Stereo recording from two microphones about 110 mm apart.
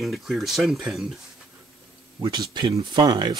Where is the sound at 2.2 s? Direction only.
40° right (ahead or behind).